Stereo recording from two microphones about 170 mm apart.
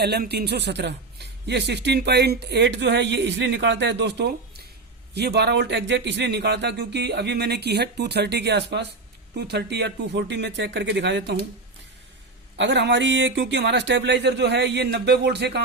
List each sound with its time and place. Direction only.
0.0 s speech: 75° right (ahead or behind); by 11.3 s 90° right
12.5 s speech: 85° right